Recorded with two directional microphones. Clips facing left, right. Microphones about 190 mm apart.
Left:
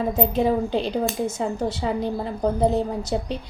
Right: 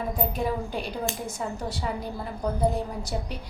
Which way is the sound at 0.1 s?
25° left (ahead or behind).